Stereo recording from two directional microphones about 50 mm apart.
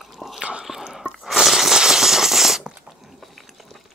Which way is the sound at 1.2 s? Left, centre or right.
Centre.